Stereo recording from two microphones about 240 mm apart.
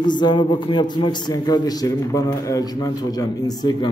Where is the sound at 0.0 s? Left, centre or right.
Centre.